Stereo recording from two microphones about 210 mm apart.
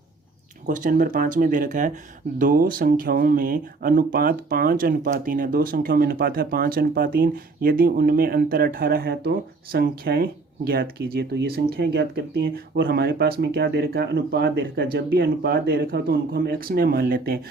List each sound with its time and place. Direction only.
0.7 s speech: 40° right (ahead or behind)